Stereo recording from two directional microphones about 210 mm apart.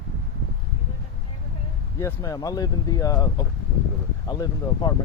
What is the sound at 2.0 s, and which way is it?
Speech, 15° left (ahead or behind).